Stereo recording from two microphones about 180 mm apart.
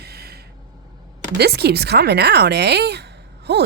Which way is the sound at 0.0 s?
60° right (ahead or behind).